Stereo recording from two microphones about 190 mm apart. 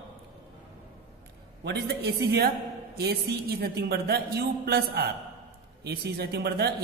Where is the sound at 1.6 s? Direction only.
55° right (ahead or behind).